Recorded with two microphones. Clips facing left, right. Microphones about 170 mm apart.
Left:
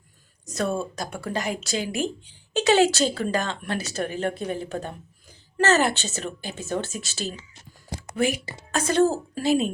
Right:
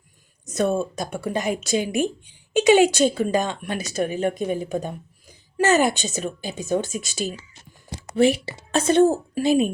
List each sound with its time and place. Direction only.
0.5 s speech: 20° right (ahead or behind)
8.1 s speech: 30° right (ahead or behind)
8.9 s speech: 20° right (ahead or behind)